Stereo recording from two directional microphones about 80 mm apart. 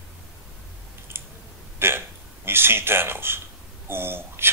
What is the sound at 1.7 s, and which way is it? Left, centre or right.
A man's voice, right.